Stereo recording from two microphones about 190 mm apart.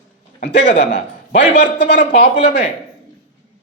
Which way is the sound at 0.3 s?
60° left (ahead or behind).